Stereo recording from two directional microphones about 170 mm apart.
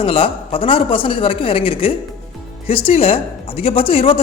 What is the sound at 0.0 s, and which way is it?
Speech, 30° left (ahead or behind).